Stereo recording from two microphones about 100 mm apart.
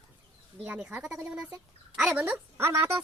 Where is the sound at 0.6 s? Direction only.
10° right (ahead or behind).